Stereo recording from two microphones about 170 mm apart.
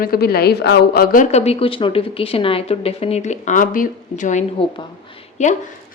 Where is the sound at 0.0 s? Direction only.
65° left (ahead or behind).